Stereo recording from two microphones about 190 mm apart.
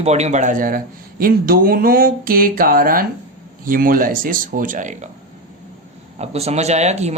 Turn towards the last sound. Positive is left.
turn(degrees=-35)  # may be behind; listen again after turning